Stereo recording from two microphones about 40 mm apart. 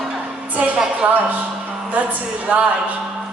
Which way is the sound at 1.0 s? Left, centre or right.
Right.